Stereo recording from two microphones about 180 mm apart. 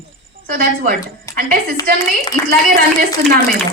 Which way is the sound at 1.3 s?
15° left (ahead or behind).